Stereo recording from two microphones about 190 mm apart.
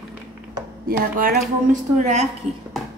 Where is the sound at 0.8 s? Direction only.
50° right (ahead or behind).